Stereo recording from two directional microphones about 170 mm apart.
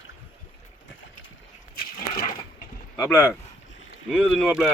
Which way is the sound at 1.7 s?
55° left (ahead or behind).